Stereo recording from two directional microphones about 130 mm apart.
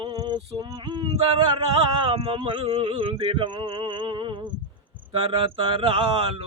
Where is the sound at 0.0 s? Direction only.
40° right (ahead or behind).